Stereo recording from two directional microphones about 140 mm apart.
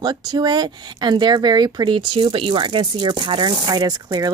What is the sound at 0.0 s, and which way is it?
A woman's voice, 30° right (ahead or behind).